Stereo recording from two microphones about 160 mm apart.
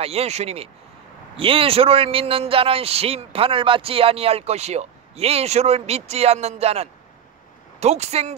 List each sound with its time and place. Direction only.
0.0 s a man's voice: 40° right (ahead or behind)